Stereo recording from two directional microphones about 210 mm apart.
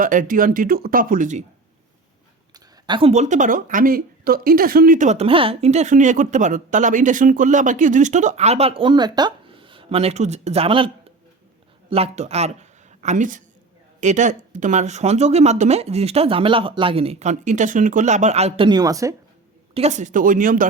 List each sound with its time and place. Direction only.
0.0 s a woman's voice: 40° right (ahead or behind)
2.5 s a woman's voice: 20° right (ahead or behind)
19.7 s a woman's voice: 30° right (ahead or behind)